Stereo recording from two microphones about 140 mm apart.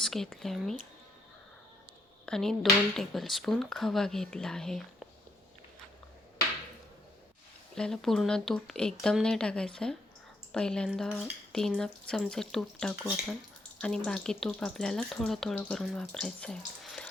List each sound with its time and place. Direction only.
0.0 s speech: centre (ahead or behind)
2.2 s speech: 5° left (ahead or behind)
7.8 s speech: 5° left (ahead or behind)